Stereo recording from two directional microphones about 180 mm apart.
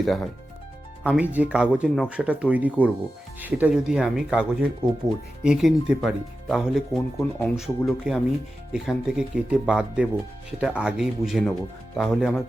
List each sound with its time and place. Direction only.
0.0 s speech: centre (ahead or behind)
7.2 s speech: 10° left (ahead or behind)
7.5 s speech: centre (ahead or behind)